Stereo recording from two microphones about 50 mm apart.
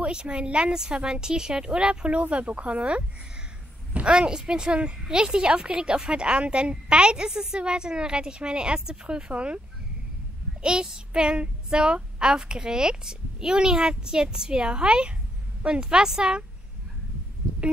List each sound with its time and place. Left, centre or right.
0.0 s speech: right
5.1 s child singing: centre
10.6 s child singing: centre